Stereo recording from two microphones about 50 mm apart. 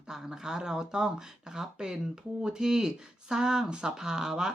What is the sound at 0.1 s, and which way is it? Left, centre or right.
Speech, centre.